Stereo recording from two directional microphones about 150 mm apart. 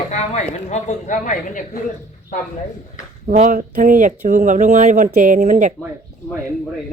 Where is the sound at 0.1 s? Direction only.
50° left (ahead or behind).